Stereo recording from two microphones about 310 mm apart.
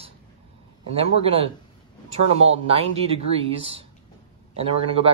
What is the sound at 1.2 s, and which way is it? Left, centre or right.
Speech, centre.